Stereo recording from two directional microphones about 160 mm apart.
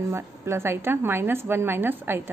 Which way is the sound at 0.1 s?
15° right (ahead or behind).